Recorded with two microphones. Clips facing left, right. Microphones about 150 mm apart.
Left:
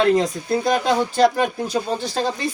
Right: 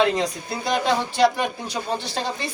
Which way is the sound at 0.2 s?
45° left (ahead or behind).